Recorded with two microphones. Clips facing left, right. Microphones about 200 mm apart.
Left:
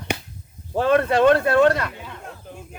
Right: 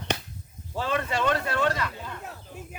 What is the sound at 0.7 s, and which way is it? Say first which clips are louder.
Speech: left 10 dB; 55° left (ahead or behind).